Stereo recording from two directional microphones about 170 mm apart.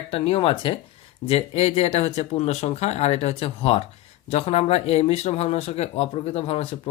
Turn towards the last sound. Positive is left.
turn(degrees=35)  # may be behind; listen again after turning